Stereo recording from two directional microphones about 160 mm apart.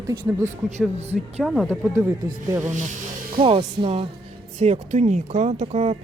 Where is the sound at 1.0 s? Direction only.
40° right (ahead or behind).